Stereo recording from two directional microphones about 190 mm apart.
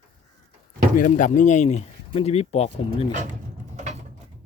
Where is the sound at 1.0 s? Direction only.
45° left (ahead or behind).